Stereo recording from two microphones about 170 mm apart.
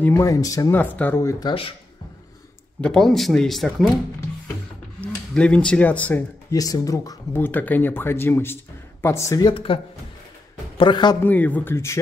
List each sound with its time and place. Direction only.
0.0 s speech: 15° left (ahead or behind)
1.4 s speech: 30° left (ahead or behind)
2.8 s speech: 5° left (ahead or behind)
5.0 s speech: 5° left (ahead or behind)
6.5 s speech: 20° left (ahead or behind)
9.5 s speech: 30° left (ahead or behind)
10.8 s speech: 25° left (ahead or behind)
11.2 s speech: 10° left (ahead or behind)